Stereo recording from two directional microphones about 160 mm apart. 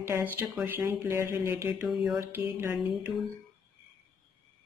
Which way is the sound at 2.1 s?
15° right (ahead or behind).